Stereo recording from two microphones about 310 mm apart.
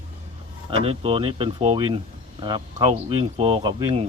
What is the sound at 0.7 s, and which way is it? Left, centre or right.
Speech, centre.